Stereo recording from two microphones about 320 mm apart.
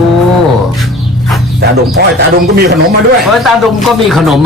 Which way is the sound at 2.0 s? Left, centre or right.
Right.